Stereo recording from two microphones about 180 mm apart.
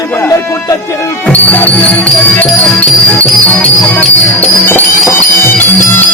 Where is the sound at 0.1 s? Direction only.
15° left (ahead or behind).